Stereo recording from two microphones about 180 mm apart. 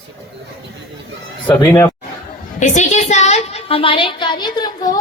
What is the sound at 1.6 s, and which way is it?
Speech, 15° left (ahead or behind).